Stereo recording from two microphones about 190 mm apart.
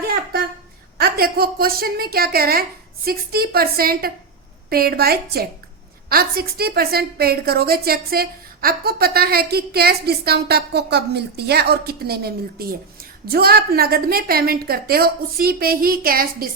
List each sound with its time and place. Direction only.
0.9 s a woman's voice: 55° right (ahead or behind)